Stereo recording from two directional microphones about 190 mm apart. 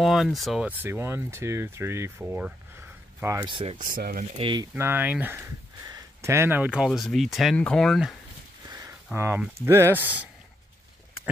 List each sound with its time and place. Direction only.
0.0 s speech: centre (ahead or behind)
3.3 s speech: 25° right (ahead or behind)
3.7 s speech: 45° right (ahead or behind)
4.4 s speech: 25° right (ahead or behind)
4.7 s speech: 10° right (ahead or behind)
8.6 s speech: 20° right (ahead or behind)